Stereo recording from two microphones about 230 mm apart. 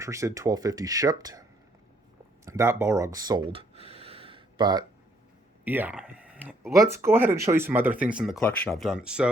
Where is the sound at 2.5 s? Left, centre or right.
Centre.